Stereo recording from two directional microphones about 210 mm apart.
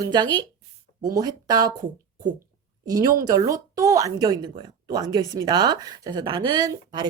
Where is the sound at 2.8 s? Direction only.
15° right (ahead or behind).